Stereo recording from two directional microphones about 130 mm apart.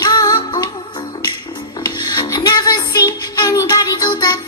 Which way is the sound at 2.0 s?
30° left (ahead or behind).